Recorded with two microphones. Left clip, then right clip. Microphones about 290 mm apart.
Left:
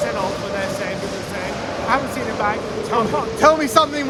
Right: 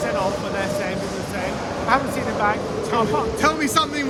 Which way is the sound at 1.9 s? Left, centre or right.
Centre.